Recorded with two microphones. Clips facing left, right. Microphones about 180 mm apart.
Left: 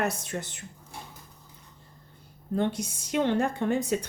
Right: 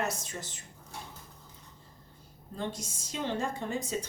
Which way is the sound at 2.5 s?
65° left (ahead or behind).